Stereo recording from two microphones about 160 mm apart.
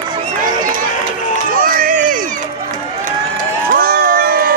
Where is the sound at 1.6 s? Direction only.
60° right (ahead or behind).